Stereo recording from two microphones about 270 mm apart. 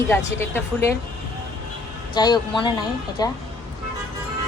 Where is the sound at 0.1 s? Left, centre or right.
Centre.